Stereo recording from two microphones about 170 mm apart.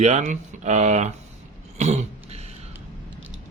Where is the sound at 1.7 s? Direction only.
40° right (ahead or behind).